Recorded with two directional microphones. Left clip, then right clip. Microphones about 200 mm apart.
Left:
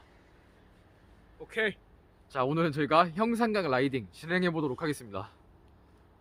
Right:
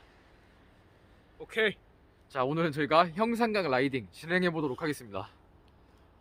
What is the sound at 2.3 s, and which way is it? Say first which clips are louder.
A man's voice: left 1 dB; 10° left (ahead or behind).